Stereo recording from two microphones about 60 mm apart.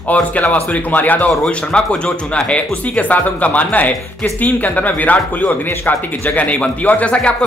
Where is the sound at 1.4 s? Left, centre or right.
Centre.